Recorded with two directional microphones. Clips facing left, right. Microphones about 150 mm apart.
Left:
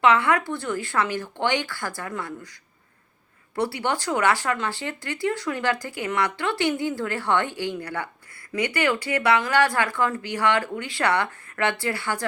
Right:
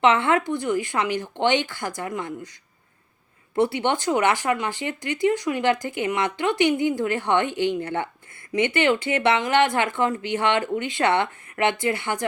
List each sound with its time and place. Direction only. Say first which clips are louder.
0.0 s speech: right 1 dB; 25° right (ahead or behind)
3.5 s speech: right 4 dB; 20° right (ahead or behind)